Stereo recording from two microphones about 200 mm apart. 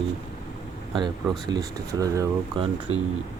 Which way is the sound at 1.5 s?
20° right (ahead or behind).